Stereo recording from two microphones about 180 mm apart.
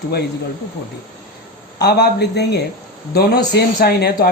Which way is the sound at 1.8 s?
65° left (ahead or behind).